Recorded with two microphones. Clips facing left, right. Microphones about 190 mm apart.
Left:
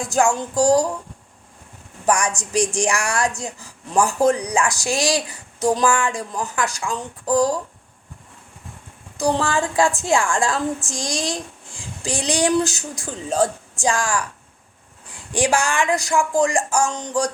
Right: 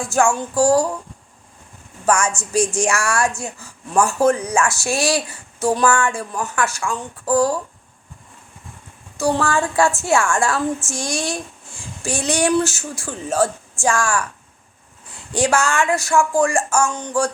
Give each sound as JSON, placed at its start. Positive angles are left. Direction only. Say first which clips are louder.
{"t": 0.0, "sound": "a woman's voice", "louder": "right 1 dB", "side_deg": 20}
{"t": 2.0, "sound": "a woman's voice", "louder": "right 1 dB", "side_deg": 15}
{"t": 9.4, "sound": "a woman's voice", "louder": "right 1 dB", "side_deg": 15}
{"t": 12.0, "sound": "a woman's voice", "louder": "right 1 dB", "side_deg": 15}